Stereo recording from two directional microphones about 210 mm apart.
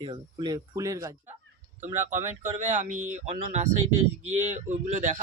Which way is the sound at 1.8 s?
35° right (ahead or behind).